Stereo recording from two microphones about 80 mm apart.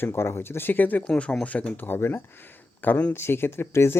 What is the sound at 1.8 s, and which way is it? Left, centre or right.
Speech, left.